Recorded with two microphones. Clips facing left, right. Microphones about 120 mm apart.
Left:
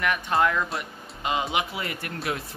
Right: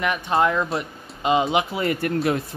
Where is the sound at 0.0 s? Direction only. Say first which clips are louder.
Right 3 dB; 20° right (ahead or behind).